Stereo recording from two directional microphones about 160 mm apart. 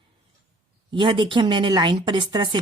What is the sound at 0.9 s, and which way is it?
A woman's voice, 30° right (ahead or behind).